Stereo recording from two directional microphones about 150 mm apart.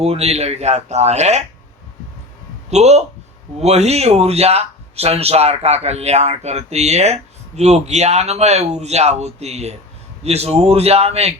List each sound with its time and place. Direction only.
0.0 s speech: 45° right (ahead or behind)
2.6 s a man's voice: 50° right (ahead or behind)